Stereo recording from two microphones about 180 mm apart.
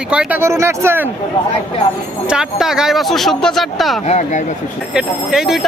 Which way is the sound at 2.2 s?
5° right (ahead or behind).